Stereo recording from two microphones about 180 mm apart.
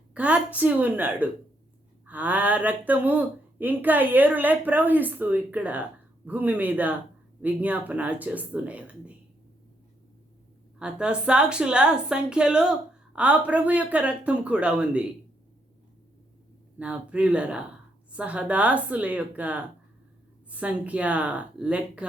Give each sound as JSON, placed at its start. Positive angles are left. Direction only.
{"t": 0.1, "sound": "speech", "side_deg": -5}
{"t": 10.8, "sound": "a woman's voice", "side_deg": -5}
{"t": 16.7, "sound": "speech", "side_deg": -5}